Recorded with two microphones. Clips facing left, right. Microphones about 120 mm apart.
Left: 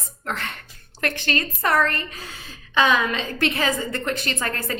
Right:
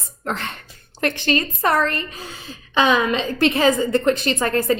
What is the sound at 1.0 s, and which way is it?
A woman's voice, 25° right (ahead or behind).